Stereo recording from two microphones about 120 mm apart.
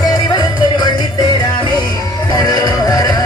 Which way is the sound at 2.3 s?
35° left (ahead or behind).